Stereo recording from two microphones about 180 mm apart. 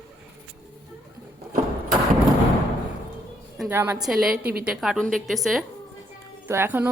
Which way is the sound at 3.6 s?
15° right (ahead or behind).